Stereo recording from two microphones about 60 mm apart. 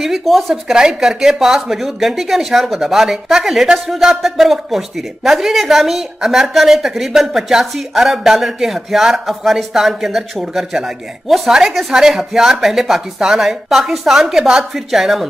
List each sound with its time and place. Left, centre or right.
0.0 s a woman's voice: centre
0.7 s a woman's voice: centre